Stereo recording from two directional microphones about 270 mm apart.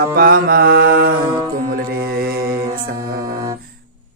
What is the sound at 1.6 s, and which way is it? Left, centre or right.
Mantra, right.